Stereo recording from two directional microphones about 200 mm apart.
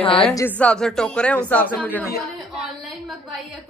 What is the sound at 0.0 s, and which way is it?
Speech, 25° left (ahead or behind).